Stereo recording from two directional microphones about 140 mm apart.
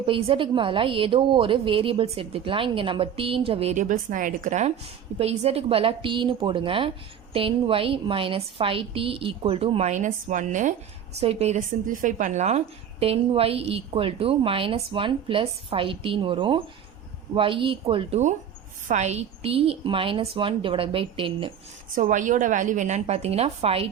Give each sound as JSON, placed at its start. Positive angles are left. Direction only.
{"t": 0.0, "sound": "a woman's voice", "side_deg": -40}
{"t": 5.1, "sound": "a woman's voice", "side_deg": -50}
{"t": 11.2, "sound": "a woman's voice", "side_deg": -50}
{"t": 11.9, "sound": "a woman's voice", "side_deg": -65}
{"t": 21.9, "sound": "a woman's voice", "side_deg": -65}